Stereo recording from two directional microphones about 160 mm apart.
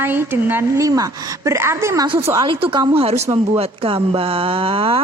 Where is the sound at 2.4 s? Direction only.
30° right (ahead or behind).